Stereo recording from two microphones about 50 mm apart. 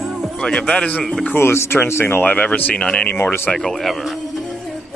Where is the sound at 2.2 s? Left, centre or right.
Left.